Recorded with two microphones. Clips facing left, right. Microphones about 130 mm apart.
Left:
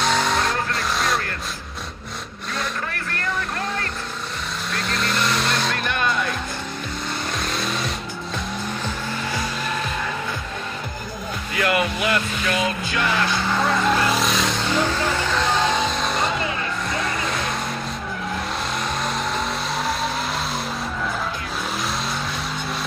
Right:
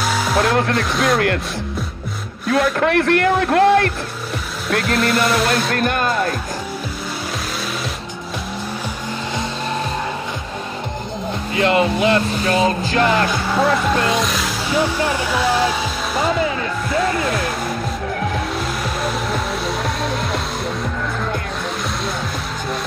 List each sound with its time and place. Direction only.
0.0 s music: 5° right (ahead or behind)
0.5 s speech: 60° right (ahead or behind)
2.5 s speech: 65° right (ahead or behind)
4.9 s music: 5° right (ahead or behind)
5.7 s speech: 50° right (ahead or behind)
11.5 s speech: 25° right (ahead or behind)
13.5 s speech: 5° right (ahead or behind)
14.0 s vehicle: centre (ahead or behind)
18.9 s vehicle: 5° right (ahead or behind)